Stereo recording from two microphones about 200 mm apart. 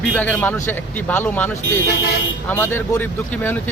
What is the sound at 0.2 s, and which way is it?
Speech, 10° left (ahead or behind).